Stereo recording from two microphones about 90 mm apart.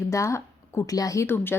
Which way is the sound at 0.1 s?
35° left (ahead or behind).